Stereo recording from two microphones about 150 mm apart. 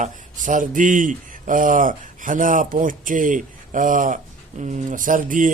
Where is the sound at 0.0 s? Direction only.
60° right (ahead or behind).